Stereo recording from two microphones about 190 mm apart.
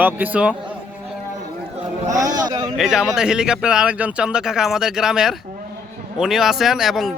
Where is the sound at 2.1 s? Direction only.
20° right (ahead or behind).